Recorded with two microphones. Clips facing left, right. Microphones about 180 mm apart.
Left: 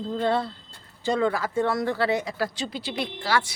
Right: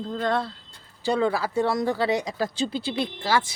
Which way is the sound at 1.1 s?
10° right (ahead or behind).